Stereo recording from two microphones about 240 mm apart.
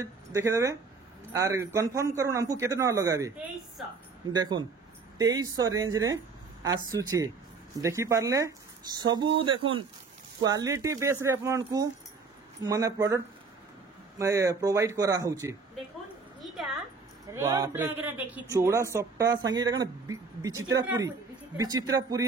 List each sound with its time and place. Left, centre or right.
0.0 s a man's voice: centre
16.3 s a sound: centre
17.3 s a man's voice: centre